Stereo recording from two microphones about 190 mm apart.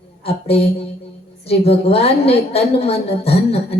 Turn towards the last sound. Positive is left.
turn(degrees=30)  # may be behind; listen again after turning